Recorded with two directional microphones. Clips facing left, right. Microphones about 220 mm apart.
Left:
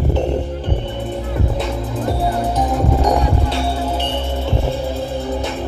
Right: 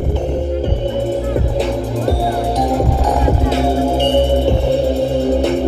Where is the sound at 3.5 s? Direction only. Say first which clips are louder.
Right 6 dB; 50° right (ahead or behind).